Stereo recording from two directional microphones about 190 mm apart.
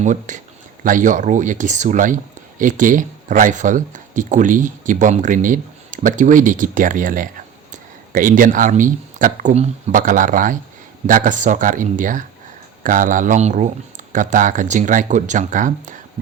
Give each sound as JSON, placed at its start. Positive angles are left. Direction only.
{"t": 0.0, "sound": "speech", "side_deg": -40}